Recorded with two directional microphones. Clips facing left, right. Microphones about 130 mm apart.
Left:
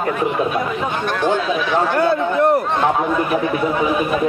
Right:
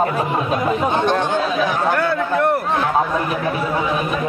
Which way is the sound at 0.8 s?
25° right (ahead or behind).